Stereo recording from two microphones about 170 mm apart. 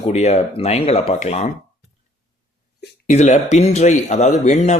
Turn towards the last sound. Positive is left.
turn(degrees=45)  # may be behind; listen again after turning